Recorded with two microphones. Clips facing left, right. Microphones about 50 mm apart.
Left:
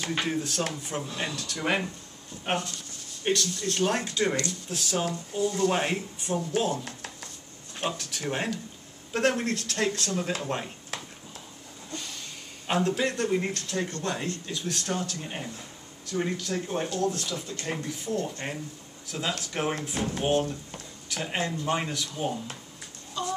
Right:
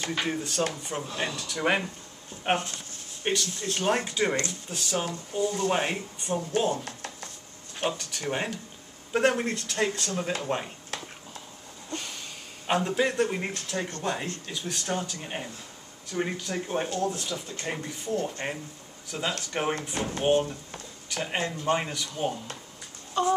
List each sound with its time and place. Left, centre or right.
0.2 s speech: centre
2.4 s speech: right; by 6.7 s centre
6.8 s a sound: centre
7.8 s speech: centre
12.6 s speech: centre
23.2 s a sound: right